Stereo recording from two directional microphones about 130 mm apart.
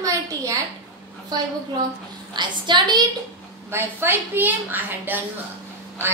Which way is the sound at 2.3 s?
35° right (ahead or behind).